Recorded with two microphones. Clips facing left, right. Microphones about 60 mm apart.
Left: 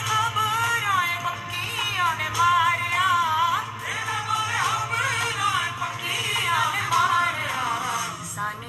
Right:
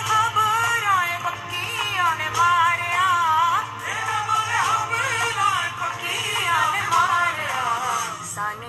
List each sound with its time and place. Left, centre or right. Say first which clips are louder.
0.1 s music: right 4 dB; centre